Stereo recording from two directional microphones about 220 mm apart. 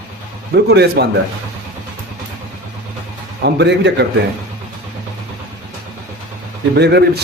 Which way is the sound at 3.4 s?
50° right (ahead or behind).